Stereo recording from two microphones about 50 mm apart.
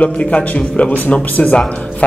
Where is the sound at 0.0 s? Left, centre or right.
Left.